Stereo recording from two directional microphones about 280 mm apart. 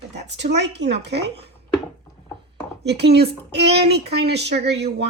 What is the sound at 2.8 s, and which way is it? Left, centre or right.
Speech, right.